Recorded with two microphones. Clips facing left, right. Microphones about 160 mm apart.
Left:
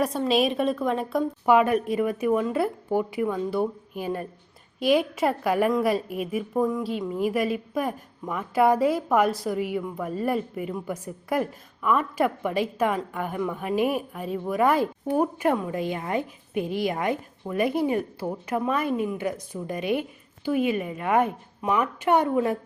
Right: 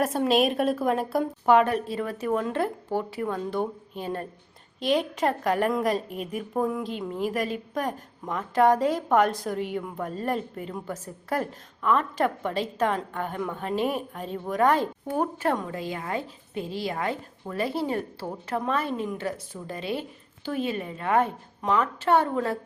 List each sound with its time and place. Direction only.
0.0 s a woman's voice: centre (ahead or behind)
1.5 s a woman's voice: 10° left (ahead or behind)
6.5 s a woman's voice: 5° right (ahead or behind); by 22.5 s 15° left (ahead or behind)